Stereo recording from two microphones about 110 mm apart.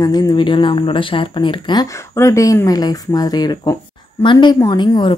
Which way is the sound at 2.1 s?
25° left (ahead or behind).